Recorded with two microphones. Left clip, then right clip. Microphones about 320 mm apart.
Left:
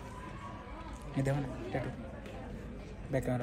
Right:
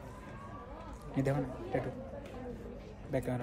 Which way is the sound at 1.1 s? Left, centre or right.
Centre.